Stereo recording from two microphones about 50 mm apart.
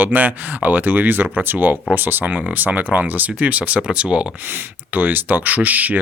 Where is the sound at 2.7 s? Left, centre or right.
Right.